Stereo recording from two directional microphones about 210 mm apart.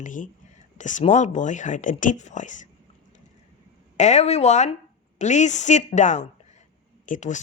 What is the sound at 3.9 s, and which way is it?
Speech, 35° left (ahead or behind).